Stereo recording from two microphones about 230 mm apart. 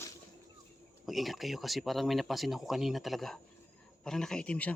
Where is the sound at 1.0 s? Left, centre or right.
Centre.